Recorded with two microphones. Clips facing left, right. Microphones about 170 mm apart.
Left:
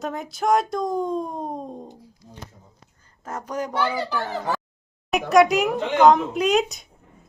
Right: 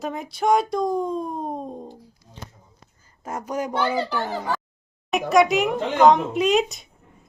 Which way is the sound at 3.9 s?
15° right (ahead or behind).